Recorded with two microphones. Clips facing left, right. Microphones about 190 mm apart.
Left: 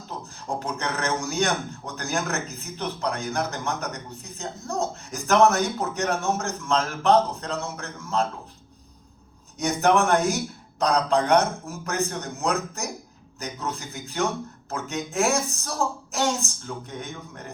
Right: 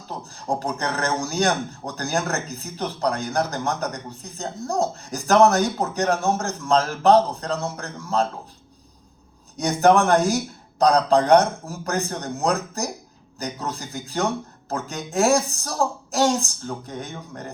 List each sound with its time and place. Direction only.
0.4 s a man's voice: 35° right (ahead or behind)
9.6 s a man's voice: 35° right (ahead or behind)